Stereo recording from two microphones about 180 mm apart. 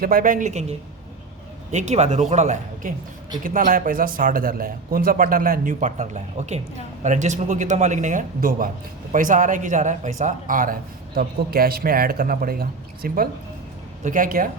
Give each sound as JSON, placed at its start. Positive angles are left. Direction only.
{"t": 0.0, "sound": "a man's voice", "side_deg": -50}
{"t": 1.7, "sound": "a man's voice", "side_deg": -40}